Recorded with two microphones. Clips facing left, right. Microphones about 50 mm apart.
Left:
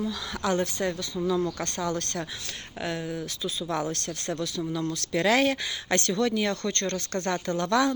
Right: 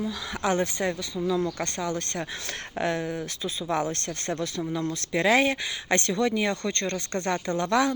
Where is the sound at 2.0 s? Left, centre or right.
Right.